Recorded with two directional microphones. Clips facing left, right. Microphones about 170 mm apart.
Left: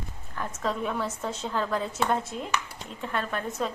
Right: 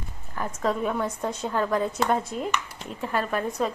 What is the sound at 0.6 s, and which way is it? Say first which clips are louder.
A woman's voice: right 4 dB; 5° right (ahead or behind).